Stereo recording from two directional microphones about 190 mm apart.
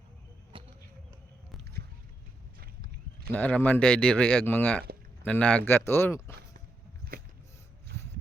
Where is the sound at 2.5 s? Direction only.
50° right (ahead or behind).